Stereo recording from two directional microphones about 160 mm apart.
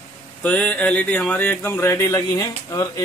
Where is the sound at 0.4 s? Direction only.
10° left (ahead or behind).